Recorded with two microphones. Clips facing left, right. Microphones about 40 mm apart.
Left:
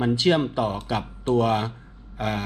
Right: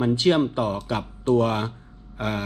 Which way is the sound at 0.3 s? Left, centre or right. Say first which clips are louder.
Right 1 dB; left.